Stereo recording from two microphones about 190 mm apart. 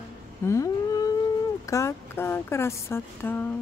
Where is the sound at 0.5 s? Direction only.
20° left (ahead or behind).